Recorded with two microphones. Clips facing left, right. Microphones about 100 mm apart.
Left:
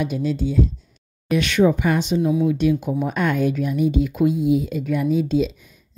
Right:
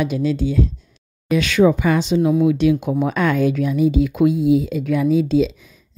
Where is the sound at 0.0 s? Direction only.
90° right.